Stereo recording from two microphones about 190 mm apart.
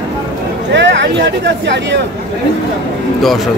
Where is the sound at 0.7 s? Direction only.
70° right (ahead or behind).